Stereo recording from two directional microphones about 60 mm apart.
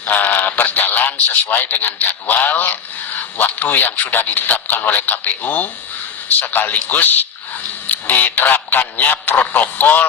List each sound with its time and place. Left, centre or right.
0.1 s a man's voice: left